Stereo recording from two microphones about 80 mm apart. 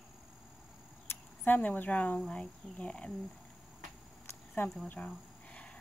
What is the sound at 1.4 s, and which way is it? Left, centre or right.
Speech, left.